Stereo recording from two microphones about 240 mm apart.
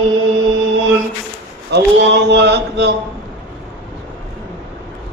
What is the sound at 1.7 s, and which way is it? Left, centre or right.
Chant, right.